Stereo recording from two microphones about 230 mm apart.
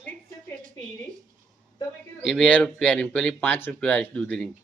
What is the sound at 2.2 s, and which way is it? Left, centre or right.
Speech, centre.